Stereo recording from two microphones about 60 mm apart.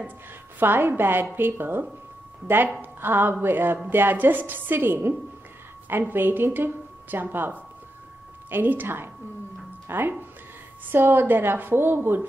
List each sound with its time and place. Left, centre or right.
0.6 s a woman's voice: right